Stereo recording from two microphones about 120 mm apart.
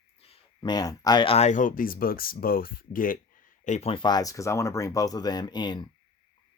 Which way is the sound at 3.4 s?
90° left.